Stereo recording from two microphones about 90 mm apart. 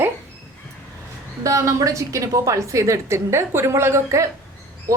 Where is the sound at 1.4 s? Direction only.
35° right (ahead or behind).